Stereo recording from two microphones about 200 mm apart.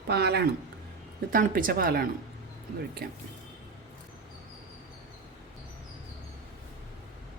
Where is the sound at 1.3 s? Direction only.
45° right (ahead or behind).